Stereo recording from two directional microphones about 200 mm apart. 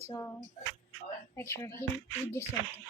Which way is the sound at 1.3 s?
15° left (ahead or behind).